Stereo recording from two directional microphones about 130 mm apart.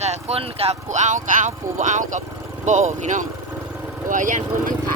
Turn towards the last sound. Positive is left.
turn(degrees=-85)